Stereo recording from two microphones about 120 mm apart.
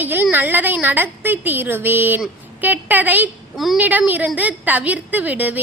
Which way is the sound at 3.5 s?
Centre (ahead or behind).